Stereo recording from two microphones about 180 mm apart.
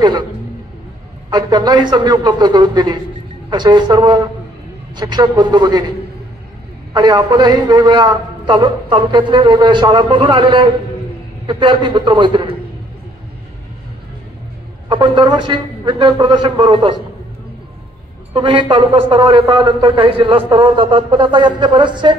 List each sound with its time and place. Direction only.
1.3 s a man's voice: 25° right (ahead or behind)
6.9 s a man's voice: 25° right (ahead or behind)
14.9 s a man's voice: 25° right (ahead or behind)
18.3 s a man's voice: 25° right (ahead or behind)